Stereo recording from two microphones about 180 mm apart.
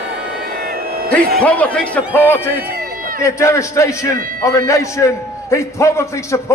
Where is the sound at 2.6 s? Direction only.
55° right (ahead or behind).